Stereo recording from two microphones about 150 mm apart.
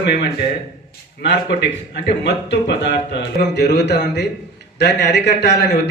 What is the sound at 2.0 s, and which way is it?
A man's voice, 90° left.